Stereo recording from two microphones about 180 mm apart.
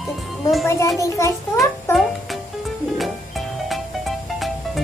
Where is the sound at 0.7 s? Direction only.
15° left (ahead or behind).